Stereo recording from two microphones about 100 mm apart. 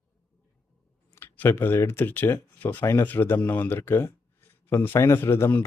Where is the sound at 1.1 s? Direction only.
20° left (ahead or behind).